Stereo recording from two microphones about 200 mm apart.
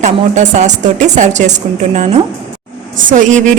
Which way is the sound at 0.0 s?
35° right (ahead or behind).